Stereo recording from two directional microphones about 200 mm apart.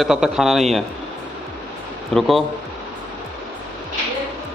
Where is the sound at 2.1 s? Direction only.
Centre (ahead or behind).